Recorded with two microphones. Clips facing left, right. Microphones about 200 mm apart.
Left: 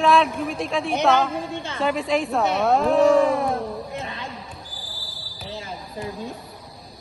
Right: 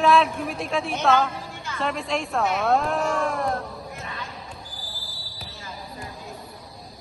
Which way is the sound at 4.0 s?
30° left (ahead or behind).